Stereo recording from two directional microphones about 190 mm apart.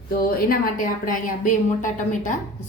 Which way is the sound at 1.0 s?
40° left (ahead or behind).